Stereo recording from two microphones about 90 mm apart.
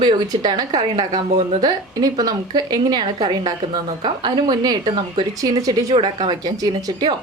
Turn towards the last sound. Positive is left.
turn(degrees=-45)  # may be behind; listen again after turning